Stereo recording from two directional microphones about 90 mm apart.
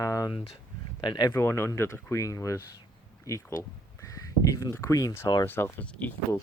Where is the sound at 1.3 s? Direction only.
30° left (ahead or behind).